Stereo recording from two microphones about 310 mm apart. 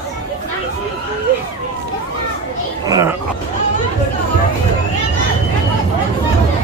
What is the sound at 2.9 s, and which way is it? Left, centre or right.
Speech, centre.